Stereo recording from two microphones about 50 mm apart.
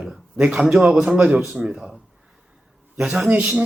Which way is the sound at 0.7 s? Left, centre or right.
Centre.